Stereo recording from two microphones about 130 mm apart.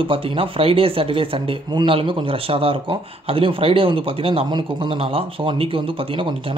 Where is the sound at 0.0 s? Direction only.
45° right (ahead or behind).